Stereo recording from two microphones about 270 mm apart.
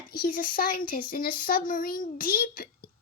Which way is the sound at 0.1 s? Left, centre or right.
Left.